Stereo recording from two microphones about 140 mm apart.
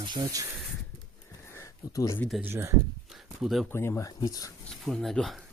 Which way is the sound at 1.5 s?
25° left (ahead or behind).